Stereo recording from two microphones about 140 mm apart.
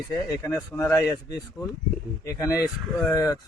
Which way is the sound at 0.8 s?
20° left (ahead or behind).